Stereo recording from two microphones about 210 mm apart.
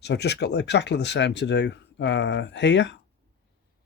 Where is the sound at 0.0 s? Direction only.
55° left (ahead or behind).